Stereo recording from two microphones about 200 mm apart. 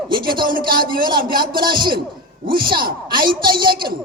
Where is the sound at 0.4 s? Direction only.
45° right (ahead or behind).